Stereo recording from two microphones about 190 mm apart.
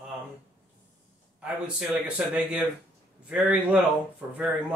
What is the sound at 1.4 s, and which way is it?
A man's voice, 5° right (ahead or behind).